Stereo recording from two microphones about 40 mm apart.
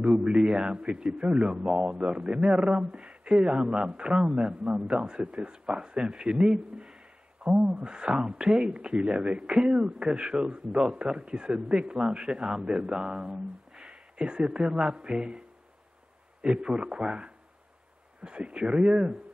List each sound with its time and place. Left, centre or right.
0.0 s speech: right
1.0 s speech: centre
1.3 s speech: right
6.5 s a man's voice: centre
16.5 s speech: right